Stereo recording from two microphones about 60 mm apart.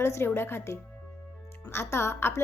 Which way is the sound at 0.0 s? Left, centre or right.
Left.